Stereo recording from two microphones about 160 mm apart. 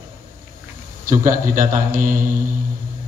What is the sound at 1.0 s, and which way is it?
Speech, 55° right (ahead or behind).